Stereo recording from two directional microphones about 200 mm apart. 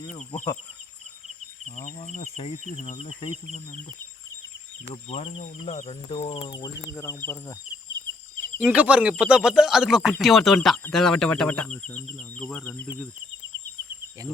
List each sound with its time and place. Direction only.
0.1 s speech: 35° left (ahead or behind)
1.7 s speech: 35° left (ahead or behind)
3.2 s insect: 25° left (ahead or behind)
5.0 s speech: 30° left (ahead or behind)
6.9 s speech: 10° left (ahead or behind)
8.7 s speech: 5° right (ahead or behind)